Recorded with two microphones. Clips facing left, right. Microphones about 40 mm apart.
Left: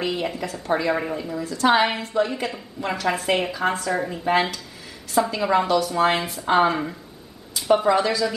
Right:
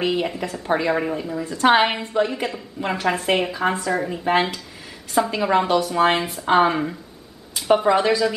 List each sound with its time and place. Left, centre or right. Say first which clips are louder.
0.0 s speech: right 3 dB; centre
1.5 s a woman's voice: right 2 dB; right
2.2 s speech: right 2 dB; centre